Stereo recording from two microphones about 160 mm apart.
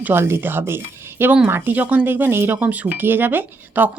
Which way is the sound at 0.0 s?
15° right (ahead or behind).